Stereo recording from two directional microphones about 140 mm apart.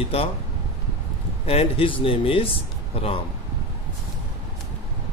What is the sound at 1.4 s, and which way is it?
A man's voice, 45° left (ahead or behind).